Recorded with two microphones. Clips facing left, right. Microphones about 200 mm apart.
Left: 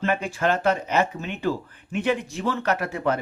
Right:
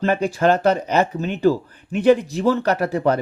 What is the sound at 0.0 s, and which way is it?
Speech, 35° right (ahead or behind).